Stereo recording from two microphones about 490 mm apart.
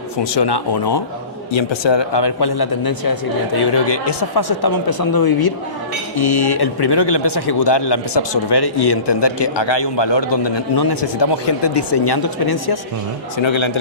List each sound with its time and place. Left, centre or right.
0.3 s a man's voice: left
13.4 s a man's voice: left